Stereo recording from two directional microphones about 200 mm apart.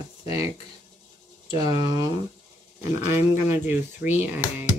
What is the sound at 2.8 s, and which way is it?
Speech, 15° right (ahead or behind).